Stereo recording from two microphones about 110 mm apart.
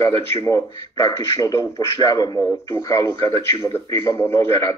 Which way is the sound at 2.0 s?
35° left (ahead or behind).